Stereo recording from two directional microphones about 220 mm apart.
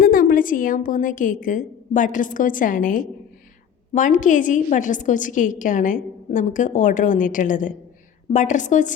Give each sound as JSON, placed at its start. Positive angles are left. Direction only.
{"t": 0.0, "sound": "a woman's voice", "side_deg": 40}